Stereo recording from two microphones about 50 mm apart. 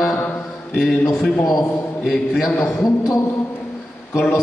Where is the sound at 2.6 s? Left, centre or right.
Left.